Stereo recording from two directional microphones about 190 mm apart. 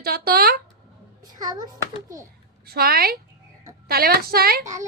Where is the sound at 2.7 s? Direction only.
50° right (ahead or behind).